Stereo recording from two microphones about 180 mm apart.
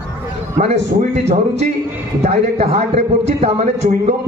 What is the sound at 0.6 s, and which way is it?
Speech, 45° right (ahead or behind).